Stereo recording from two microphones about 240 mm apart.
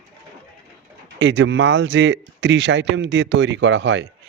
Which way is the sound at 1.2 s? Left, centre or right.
Right.